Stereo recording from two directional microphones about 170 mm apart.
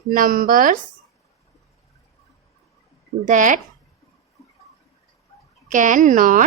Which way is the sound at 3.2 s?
50° right (ahead or behind).